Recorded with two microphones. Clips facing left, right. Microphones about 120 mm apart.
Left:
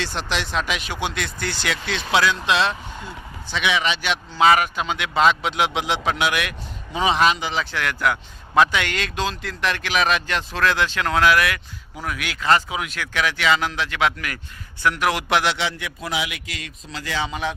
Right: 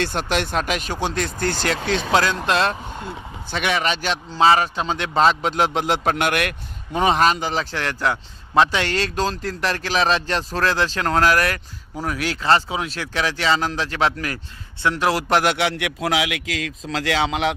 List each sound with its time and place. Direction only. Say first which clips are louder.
0.0 s a man's voice: right 4 dB; 50° right (ahead or behind); by 17.5 s 80° right